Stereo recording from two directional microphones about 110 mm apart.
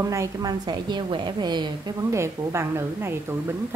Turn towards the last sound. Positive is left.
turn(degrees=-25)  # may be behind; listen again after turning